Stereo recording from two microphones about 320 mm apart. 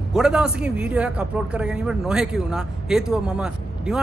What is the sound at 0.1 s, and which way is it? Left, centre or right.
A man's voice, centre.